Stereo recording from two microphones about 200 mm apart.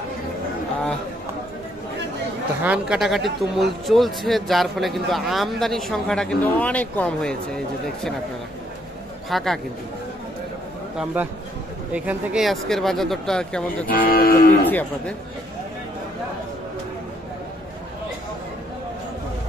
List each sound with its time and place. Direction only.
2.6 s speech: 5° right (ahead or behind)
9.3 s speech: centre (ahead or behind)
11.9 s speech: 5° right (ahead or behind)
13.8 s speech: 45° left (ahead or behind)
14.6 s speech: 10° left (ahead or behind)